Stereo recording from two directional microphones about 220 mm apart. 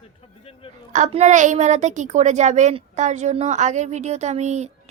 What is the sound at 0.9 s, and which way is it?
A child's voice, 35° right (ahead or behind).